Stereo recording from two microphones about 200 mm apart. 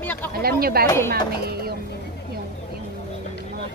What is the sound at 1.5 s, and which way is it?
Speech, 50° right (ahead or behind).